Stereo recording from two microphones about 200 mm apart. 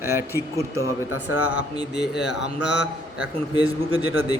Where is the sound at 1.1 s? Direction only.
90° left.